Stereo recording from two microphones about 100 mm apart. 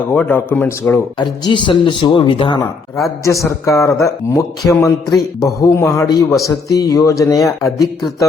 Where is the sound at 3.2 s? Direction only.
30° left (ahead or behind).